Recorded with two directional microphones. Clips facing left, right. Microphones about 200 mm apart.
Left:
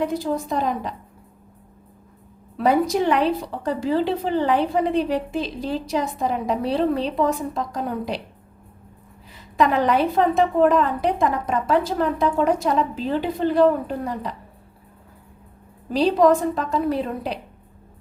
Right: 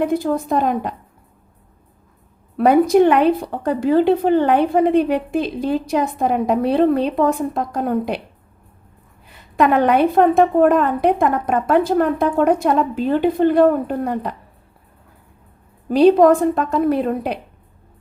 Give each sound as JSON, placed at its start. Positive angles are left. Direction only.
{"t": 0.0, "sound": "speech", "side_deg": -55}
{"t": 2.6, "sound": "speech", "side_deg": -55}
{"t": 9.3, "sound": "speech", "side_deg": -60}
{"t": 15.9, "sound": "speech", "side_deg": -55}